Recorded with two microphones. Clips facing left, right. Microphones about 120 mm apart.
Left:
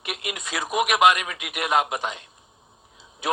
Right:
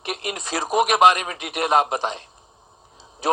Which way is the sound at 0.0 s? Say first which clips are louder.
Right 4 dB; 35° right (ahead or behind).